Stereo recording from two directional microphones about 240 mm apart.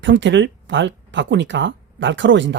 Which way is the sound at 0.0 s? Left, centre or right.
Right.